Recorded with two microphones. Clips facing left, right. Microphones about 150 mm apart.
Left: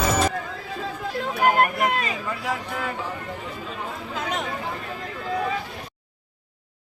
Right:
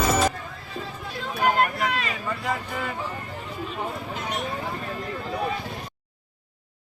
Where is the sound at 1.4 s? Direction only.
50° left (ahead or behind).